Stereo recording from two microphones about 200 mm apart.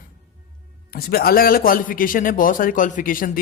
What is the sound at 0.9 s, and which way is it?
Speech, 50° left (ahead or behind).